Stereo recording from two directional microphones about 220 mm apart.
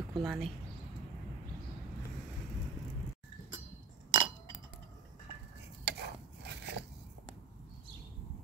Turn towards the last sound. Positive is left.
turn(degrees=-50)  # may be behind; listen again after turning